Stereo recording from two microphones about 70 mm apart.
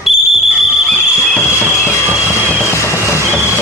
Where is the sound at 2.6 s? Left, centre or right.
Left.